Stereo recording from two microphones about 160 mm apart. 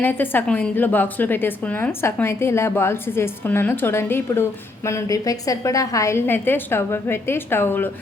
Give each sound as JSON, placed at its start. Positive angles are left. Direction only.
{"t": 0.0, "sound": "a woman's voice", "side_deg": 10}